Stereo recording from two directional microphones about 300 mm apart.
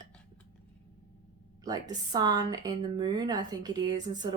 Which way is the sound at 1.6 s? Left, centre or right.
Centre.